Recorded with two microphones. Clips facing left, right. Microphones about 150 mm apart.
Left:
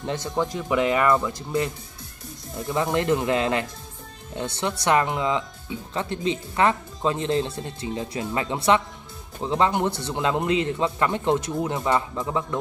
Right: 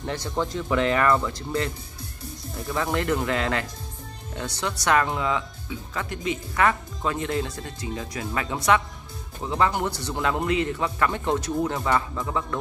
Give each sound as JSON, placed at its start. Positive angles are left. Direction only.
{"t": 0.0, "sound": "speech", "side_deg": 20}
{"t": 2.7, "sound": "speech", "side_deg": 20}